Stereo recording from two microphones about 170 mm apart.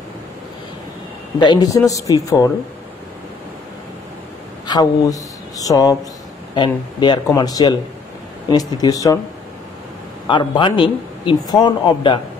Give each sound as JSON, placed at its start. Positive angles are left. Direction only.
{"t": 1.4, "sound": "a man's voice", "side_deg": 25}
{"t": 4.6, "sound": "a man's voice", "side_deg": 20}
{"t": 10.2, "sound": "a man's voice", "side_deg": 30}